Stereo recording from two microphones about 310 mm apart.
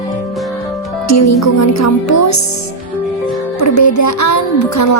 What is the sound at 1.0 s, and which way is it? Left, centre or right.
Speech, left.